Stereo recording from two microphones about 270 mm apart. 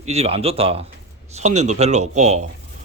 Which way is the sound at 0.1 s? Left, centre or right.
Right.